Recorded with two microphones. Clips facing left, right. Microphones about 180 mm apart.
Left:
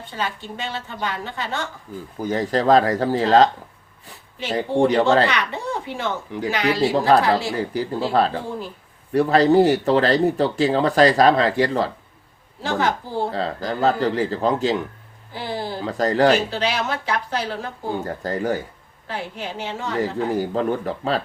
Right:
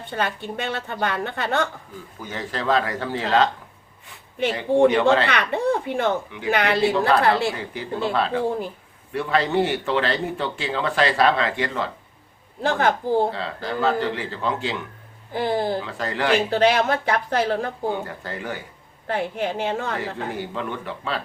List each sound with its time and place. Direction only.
0.1 s a woman's voice: 60° right (ahead or behind)
2.1 s speech: 40° left (ahead or behind)
4.5 s speech: 40° left (ahead or behind)
5.3 s a child's voice: 55° right (ahead or behind)
7.1 s speech: 40° left (ahead or behind)
12.6 s speech: 55° right (ahead or behind)
13.3 s speech: 40° left (ahead or behind)
15.3 s speech: 50° right (ahead or behind)
15.8 s speech: 40° left (ahead or behind)
16.5 s speech: 55° right (ahead or behind)
18.0 s speech: 40° left (ahead or behind)
19.0 s speech: 55° right (ahead or behind)
20.0 s speech: 40° left (ahead or behind)